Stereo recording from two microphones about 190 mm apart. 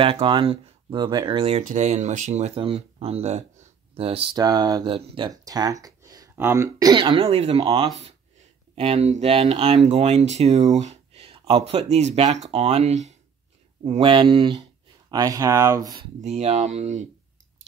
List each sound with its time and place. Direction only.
0.0 s speech: 30° right (ahead or behind)
16.2 s speech: 35° right (ahead or behind)